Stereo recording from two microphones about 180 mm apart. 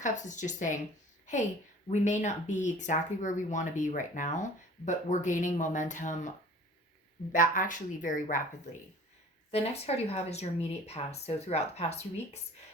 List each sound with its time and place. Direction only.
0.0 s speech: 45° left (ahead or behind)
1.9 s speech: 40° left (ahead or behind)
7.3 s speech: 50° left (ahead or behind)
9.5 s speech: 35° left (ahead or behind)